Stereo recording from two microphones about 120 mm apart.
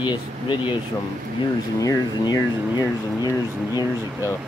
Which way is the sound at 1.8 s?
30° left (ahead or behind).